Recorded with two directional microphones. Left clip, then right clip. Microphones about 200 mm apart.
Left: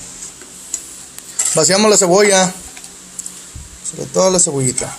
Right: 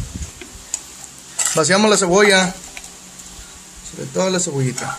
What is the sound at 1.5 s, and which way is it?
Speech, 20° left (ahead or behind).